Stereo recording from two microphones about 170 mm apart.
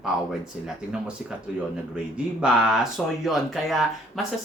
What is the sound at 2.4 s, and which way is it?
Speech, 5° right (ahead or behind).